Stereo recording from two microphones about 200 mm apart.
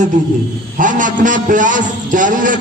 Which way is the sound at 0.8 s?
40° right (ahead or behind).